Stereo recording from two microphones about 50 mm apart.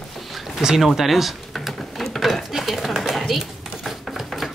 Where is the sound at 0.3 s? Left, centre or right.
Centre.